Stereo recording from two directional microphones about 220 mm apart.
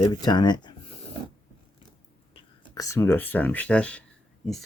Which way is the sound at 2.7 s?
15° left (ahead or behind).